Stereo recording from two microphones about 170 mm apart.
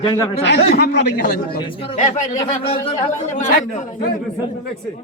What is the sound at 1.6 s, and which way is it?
Speech, 35° left (ahead or behind).